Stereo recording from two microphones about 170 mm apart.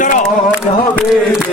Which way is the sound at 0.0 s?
50° left (ahead or behind).